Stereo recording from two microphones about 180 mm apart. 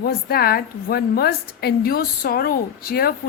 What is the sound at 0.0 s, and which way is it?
A woman's voice, 60° left (ahead or behind).